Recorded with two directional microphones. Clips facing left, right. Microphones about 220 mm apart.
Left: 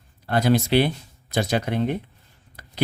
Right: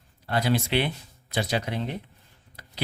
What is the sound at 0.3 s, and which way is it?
Speech, 50° left (ahead or behind).